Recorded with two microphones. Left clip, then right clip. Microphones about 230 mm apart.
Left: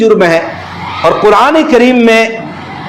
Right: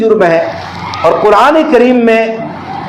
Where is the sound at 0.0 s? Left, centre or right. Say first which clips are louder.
Left 1 dB; left.